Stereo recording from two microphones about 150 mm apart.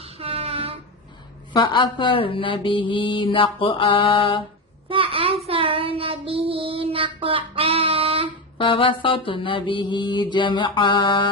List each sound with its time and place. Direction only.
0.0 s a sound: 40° right (ahead or behind)
1.5 s mantra: 30° left (ahead or behind)
4.9 s child singing: 35° right (ahead or behind)
8.5 s mantra: 35° left (ahead or behind)